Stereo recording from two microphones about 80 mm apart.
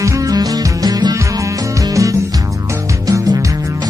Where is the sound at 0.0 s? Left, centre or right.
Right.